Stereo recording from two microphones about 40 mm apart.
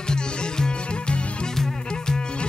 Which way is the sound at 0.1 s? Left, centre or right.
Centre.